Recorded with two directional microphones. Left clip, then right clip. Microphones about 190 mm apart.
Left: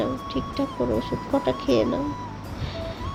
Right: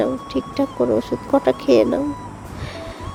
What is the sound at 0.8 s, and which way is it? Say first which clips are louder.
Speech: right 7 dB; 45° right (ahead or behind).